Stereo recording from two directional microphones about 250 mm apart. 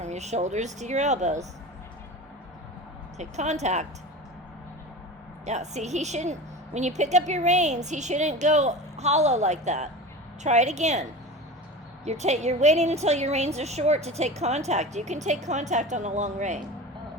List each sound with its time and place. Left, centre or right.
0.0 s a woman's voice: right
3.2 s a woman's voice: right
5.5 s a woman's voice: right
12.0 s a woman's voice: right